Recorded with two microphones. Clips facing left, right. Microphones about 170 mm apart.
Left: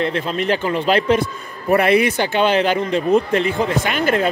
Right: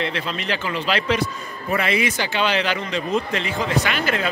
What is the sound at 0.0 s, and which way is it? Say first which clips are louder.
A man's voice: left 6 dB; 45° left (ahead or behind).